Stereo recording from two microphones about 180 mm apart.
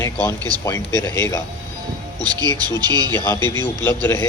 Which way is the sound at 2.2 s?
20° right (ahead or behind).